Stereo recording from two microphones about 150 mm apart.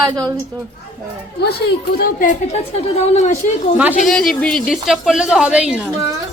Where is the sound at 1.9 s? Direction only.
65° left (ahead or behind).